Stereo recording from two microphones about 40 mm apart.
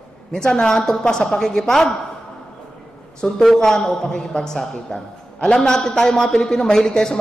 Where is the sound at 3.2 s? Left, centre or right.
Left.